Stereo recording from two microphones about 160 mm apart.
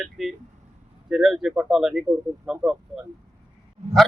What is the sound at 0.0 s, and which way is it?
A man's voice, centre (ahead or behind).